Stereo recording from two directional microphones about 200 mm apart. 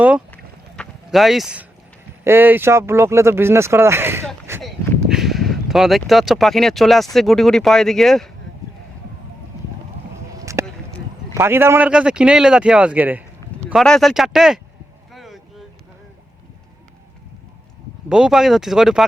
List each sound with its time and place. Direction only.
0.8 s a sound: centre (ahead or behind)
2.2 s speech: 10° right (ahead or behind)
4.6 s speech: centre (ahead or behind)
10.4 s a sound: 15° right (ahead or behind)
11.3 s speech: 10° right (ahead or behind)
15.1 s boat: centre (ahead or behind)
18.1 s speech: 5° right (ahead or behind)